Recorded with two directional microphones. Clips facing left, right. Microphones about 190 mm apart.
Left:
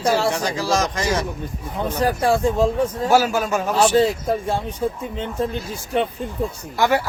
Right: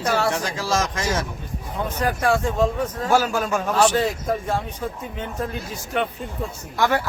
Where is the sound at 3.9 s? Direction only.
30° left (ahead or behind).